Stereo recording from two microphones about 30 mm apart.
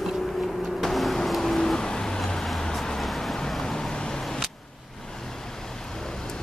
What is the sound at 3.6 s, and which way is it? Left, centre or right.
Vehicle, centre.